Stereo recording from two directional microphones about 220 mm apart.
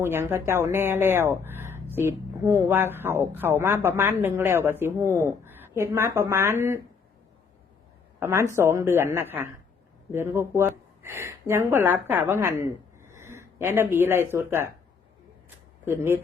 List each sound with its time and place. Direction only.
0.0 s speech: 10° right (ahead or behind)
8.2 s a woman's voice: 10° right (ahead or behind)
16.0 s speech: 10° right (ahead or behind)